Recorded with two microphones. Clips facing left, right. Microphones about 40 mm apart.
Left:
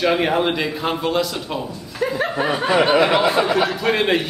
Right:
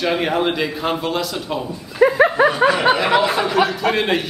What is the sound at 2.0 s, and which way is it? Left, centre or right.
Dog, right.